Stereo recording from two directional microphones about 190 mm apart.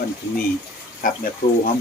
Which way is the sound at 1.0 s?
45° left (ahead or behind).